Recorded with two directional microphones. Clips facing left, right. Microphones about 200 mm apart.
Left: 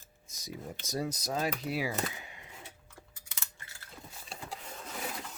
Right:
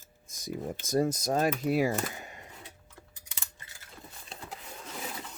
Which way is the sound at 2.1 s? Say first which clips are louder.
Right 4 dB; 45° right (ahead or behind).